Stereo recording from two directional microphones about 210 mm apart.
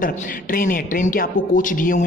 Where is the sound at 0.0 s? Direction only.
40° left (ahead or behind).